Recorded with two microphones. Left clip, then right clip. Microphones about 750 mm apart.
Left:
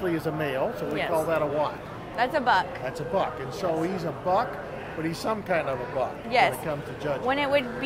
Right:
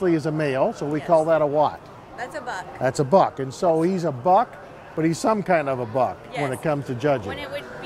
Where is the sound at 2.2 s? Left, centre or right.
Left.